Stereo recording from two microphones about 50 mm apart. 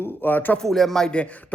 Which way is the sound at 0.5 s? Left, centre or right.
Centre.